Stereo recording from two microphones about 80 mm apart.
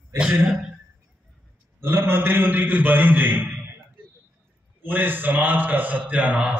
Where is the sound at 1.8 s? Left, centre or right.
Right.